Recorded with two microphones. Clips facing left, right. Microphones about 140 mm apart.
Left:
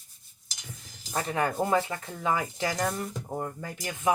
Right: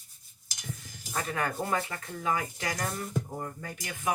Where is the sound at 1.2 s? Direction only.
30° left (ahead or behind).